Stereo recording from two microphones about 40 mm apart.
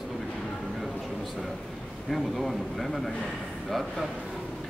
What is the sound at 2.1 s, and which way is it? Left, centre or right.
Speech, centre.